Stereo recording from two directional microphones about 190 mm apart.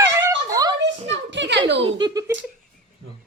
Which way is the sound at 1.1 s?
70° right (ahead or behind).